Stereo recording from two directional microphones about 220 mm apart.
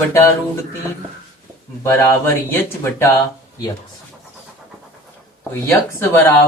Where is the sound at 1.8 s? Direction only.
10° left (ahead or behind).